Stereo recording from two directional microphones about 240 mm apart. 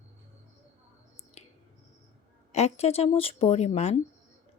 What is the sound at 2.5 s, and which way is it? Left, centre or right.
Speech, left.